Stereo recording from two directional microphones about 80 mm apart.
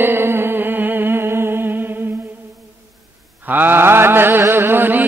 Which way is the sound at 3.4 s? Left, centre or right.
Right.